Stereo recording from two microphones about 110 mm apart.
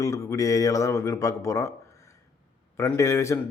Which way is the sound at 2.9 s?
25° left (ahead or behind).